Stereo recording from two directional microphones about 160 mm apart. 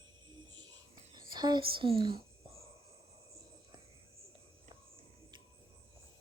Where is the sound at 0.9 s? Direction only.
25° right (ahead or behind).